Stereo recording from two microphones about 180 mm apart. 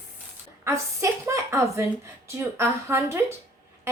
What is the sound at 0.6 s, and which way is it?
A woman's voice, 15° right (ahead or behind).